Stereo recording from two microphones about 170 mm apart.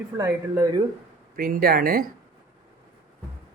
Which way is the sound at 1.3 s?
55° right (ahead or behind).